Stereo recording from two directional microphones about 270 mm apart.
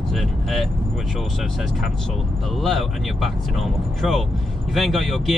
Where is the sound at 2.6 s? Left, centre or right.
Centre.